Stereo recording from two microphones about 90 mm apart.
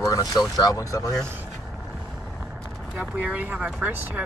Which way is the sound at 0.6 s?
40° left (ahead or behind).